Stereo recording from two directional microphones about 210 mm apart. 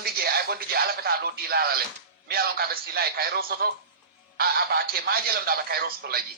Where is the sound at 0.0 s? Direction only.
45° right (ahead or behind).